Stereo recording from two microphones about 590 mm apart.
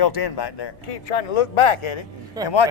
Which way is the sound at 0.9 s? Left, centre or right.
Left.